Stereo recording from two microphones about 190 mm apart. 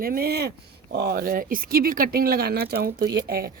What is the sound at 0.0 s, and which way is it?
A woman's voice, 50° right (ahead or behind).